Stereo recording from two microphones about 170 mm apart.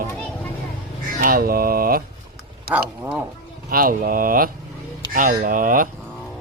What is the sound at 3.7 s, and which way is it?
Speech, 55° right (ahead or behind).